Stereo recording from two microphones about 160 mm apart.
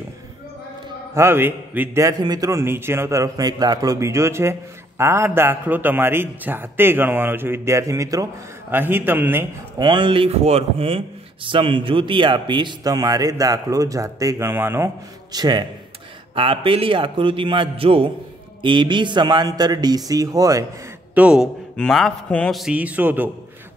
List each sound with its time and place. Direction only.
1.1 s a man's voice: 15° right (ahead or behind)
9.8 s a man's voice: 30° right (ahead or behind); by 14.9 s 15° right (ahead or behind)
15.3 s a man's voice: 25° right (ahead or behind)
21.1 s a man's voice: 5° right (ahead or behind)